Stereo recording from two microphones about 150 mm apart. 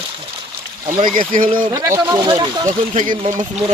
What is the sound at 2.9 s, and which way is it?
Speech, 55° right (ahead or behind).